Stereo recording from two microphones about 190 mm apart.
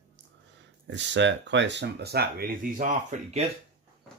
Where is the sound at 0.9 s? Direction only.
70° right (ahead or behind); by 3.4 s 35° right (ahead or behind).